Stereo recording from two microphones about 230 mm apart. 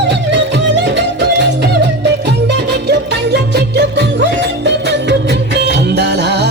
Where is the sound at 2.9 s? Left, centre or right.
Right.